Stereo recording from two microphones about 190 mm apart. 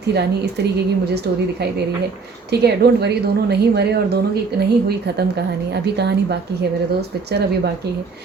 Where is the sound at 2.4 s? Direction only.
60° right (ahead or behind).